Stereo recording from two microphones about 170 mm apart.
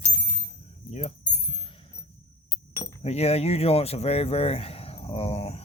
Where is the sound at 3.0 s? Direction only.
35° left (ahead or behind).